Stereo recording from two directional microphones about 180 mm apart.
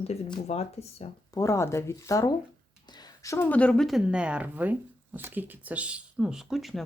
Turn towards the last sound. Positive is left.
turn(degrees=0)  # may be behind; listen again after turning